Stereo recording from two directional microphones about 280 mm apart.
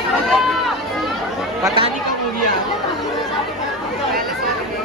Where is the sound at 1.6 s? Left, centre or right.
Centre.